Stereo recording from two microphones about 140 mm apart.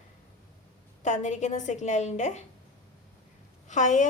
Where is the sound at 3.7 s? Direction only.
60° left (ahead or behind).